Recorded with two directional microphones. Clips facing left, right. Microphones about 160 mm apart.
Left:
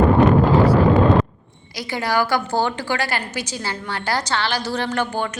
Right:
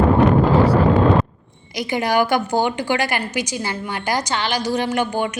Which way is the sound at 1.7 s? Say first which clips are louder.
Right 3 dB; 20° right (ahead or behind).